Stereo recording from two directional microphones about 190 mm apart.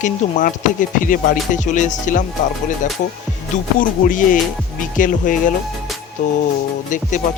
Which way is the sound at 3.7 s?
45° left (ahead or behind).